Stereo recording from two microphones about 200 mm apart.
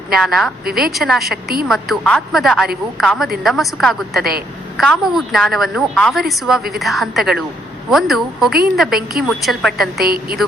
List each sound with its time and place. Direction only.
0.1 s a woman's voice: centre (ahead or behind)
4.2 s a woman's voice: 50° right (ahead or behind)
4.8 s a woman's voice: centre (ahead or behind)
10.0 s a woman's voice: 50° right (ahead or behind)